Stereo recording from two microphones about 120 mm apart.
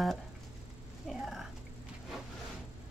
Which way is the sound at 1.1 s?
Centre (ahead or behind).